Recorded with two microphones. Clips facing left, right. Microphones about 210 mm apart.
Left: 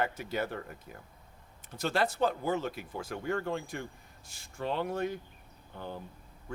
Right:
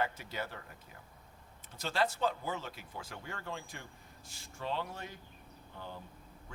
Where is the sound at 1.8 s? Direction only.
55° left (ahead or behind).